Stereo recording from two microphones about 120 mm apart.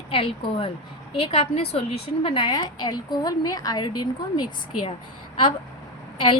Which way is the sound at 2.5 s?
35° left (ahead or behind).